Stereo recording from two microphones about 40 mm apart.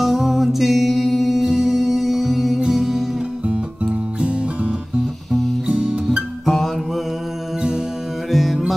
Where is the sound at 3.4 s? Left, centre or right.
Right.